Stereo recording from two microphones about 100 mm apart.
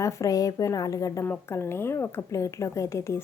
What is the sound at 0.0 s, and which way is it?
A woman's voice, 35° left (ahead or behind).